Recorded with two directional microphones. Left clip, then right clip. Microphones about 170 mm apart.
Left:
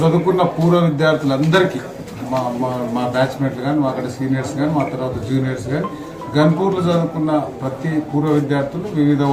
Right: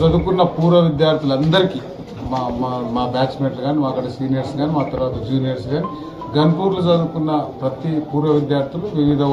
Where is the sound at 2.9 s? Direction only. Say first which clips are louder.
Left 1 dB; 10° left (ahead or behind).